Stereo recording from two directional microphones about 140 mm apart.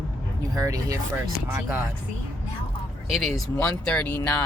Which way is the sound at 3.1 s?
Centre (ahead or behind).